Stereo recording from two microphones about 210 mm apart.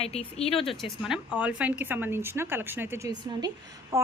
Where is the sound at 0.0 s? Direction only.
30° left (ahead or behind).